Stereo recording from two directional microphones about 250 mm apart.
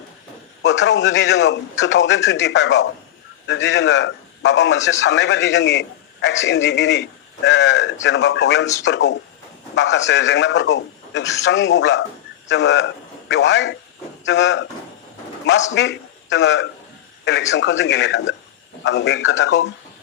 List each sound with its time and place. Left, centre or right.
0.6 s a man's voice: left